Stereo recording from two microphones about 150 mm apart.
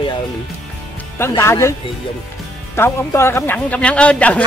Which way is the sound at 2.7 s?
15° left (ahead or behind).